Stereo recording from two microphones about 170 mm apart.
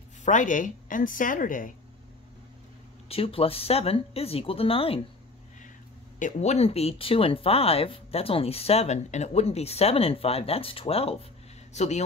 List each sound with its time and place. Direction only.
0.2 s a woman's voice: 50° left (ahead or behind)
3.1 s speech: 35° left (ahead or behind)
6.1 s speech: 45° left (ahead or behind)